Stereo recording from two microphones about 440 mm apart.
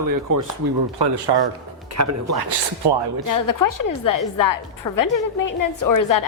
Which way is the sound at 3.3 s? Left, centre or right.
Left.